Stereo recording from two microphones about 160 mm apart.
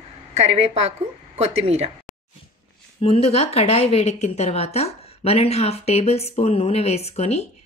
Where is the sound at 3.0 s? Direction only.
40° left (ahead or behind).